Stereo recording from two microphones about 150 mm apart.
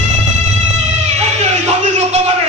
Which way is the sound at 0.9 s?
50° right (ahead or behind).